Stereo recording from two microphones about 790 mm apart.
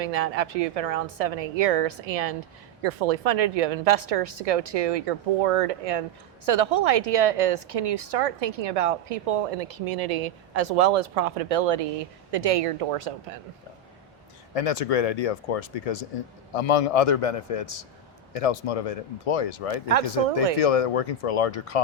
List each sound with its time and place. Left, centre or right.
0.0 s a woman's voice: right
14.5 s speech: left